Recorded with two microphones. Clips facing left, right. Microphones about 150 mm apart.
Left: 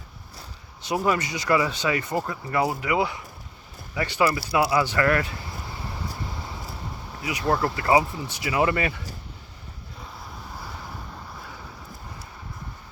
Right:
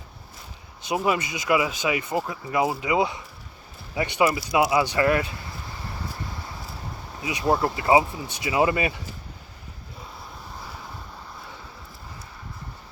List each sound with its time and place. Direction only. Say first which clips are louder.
0.9 s speech: even; 15° right (ahead or behind)
7.3 s speech: right 1 dB; 20° right (ahead or behind)